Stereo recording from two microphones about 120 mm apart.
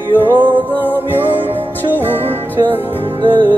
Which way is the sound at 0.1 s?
15° right (ahead or behind).